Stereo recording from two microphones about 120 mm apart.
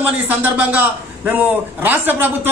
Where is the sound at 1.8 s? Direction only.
15° right (ahead or behind).